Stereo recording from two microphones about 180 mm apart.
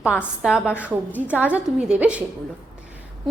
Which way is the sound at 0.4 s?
5° right (ahead or behind).